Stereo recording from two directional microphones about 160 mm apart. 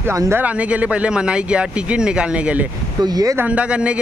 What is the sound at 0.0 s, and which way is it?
Speech, 15° right (ahead or behind).